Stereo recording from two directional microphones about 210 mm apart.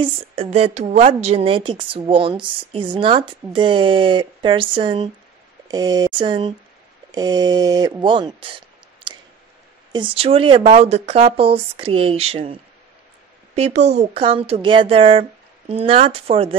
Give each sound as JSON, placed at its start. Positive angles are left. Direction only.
{"t": 0.0, "sound": "a woman's voice", "side_deg": -30}
{"t": 13.6, "sound": "a woman's voice", "side_deg": -30}